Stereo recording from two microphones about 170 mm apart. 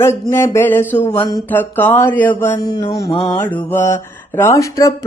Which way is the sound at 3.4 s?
10° left (ahead or behind).